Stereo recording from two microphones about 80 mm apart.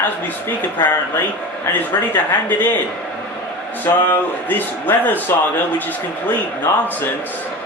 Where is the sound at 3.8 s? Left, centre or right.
Left.